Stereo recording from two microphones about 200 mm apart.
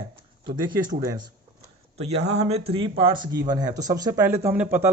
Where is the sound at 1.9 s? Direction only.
30° right (ahead or behind).